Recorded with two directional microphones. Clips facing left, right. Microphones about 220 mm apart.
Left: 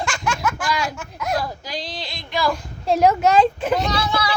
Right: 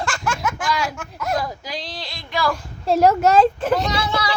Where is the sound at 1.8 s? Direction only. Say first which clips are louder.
Left 1 dB; centre (ahead or behind).